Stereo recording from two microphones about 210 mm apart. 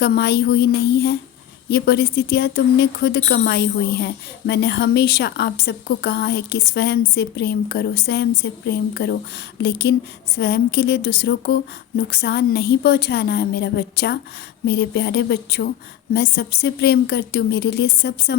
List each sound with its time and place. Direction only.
0.0 s speech: 50° left (ahead or behind)